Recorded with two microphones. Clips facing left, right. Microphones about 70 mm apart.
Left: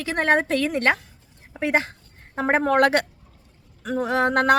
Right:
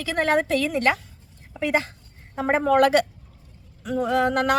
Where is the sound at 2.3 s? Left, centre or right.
Left.